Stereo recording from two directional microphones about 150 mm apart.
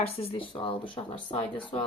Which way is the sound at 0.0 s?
40° left (ahead or behind).